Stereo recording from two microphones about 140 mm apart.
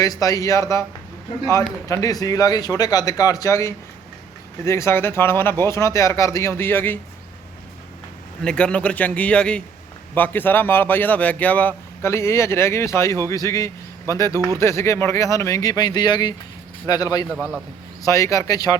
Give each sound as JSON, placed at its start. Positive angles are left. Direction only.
{"t": 0.0, "sound": "speech", "side_deg": 25}
{"t": 1.9, "sound": "speech", "side_deg": 25}
{"t": 8.4, "sound": "speech", "side_deg": 5}
{"t": 17.2, "sound": "a man's voice", "side_deg": -5}
{"t": 18.0, "sound": "speech", "side_deg": 20}